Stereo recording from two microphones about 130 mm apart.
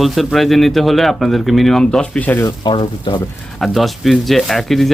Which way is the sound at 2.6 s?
35° left (ahead or behind).